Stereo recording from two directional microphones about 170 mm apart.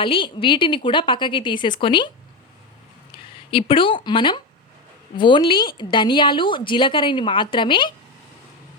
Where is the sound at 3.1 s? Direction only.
30° left (ahead or behind).